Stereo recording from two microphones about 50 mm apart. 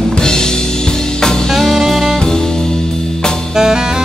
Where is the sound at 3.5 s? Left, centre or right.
Centre.